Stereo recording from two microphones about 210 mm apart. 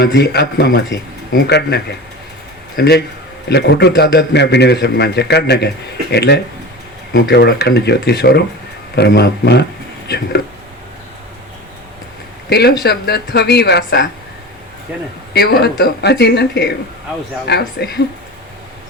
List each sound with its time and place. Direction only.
0.0 s a man's voice: 50° left (ahead or behind)
12.5 s a man's voice: 50° left (ahead or behind)
15.3 s a man's voice: 50° left (ahead or behind)